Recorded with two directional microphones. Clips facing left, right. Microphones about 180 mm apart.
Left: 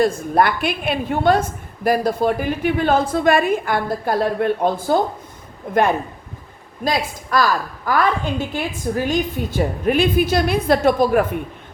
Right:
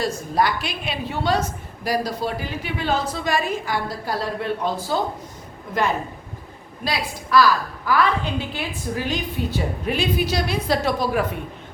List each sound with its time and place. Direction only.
0.0 s a woman's voice: 55° left (ahead or behind)
6.8 s a woman's voice: 45° left (ahead or behind)